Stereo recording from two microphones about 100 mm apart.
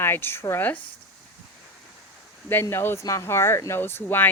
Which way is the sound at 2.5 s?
20° left (ahead or behind).